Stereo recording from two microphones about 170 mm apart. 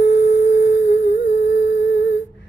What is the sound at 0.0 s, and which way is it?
Tuning fork, 80° left.